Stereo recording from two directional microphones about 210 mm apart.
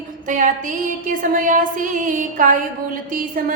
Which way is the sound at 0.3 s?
35° right (ahead or behind).